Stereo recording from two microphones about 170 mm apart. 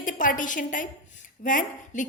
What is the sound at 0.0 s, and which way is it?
A woman's voice, 50° left (ahead or behind).